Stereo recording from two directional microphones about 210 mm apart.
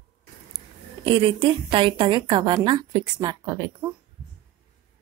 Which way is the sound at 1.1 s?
25° right (ahead or behind).